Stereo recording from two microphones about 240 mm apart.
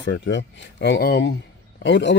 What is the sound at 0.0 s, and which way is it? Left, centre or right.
A man's voice, left.